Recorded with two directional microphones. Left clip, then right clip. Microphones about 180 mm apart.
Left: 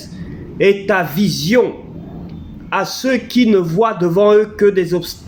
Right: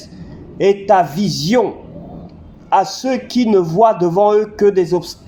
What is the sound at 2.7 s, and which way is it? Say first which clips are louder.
A man's voice: right 2 dB; 30° right (ahead or behind).